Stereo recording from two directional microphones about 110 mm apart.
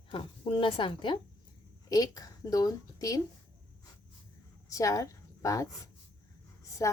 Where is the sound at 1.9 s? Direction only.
35° left (ahead or behind).